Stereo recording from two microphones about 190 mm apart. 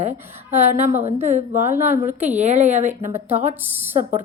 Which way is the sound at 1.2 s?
40° right (ahead or behind).